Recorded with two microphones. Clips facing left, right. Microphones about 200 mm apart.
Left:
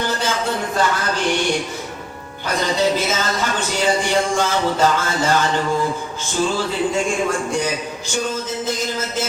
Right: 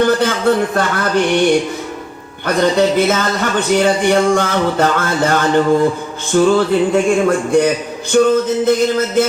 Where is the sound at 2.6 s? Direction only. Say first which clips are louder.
Right 7 dB; 60° right (ahead or behind).